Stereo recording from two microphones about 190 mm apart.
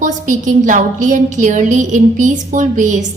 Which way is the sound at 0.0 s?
40° right (ahead or behind).